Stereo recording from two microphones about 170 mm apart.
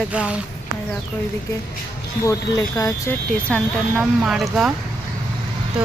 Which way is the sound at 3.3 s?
5° left (ahead or behind).